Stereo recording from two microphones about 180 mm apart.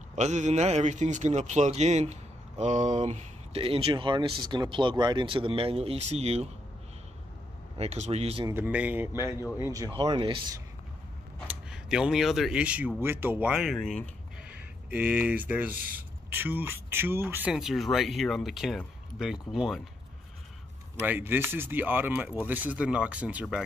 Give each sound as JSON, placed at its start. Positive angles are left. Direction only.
{"t": 0.2, "sound": "a man's voice", "side_deg": -40}
{"t": 7.7, "sound": "a man's voice", "side_deg": -35}
{"t": 8.5, "sound": "speech", "side_deg": -10}
{"t": 9.1, "sound": "speech", "side_deg": 20}
{"t": 9.6, "sound": "speech", "side_deg": -20}
{"t": 11.4, "sound": "speech", "side_deg": -5}
{"t": 21.0, "sound": "speech", "side_deg": -10}